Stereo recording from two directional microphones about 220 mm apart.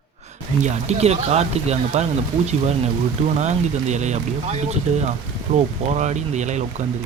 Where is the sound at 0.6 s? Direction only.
30° right (ahead or behind).